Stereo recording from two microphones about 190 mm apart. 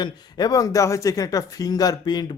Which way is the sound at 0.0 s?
20° left (ahead or behind).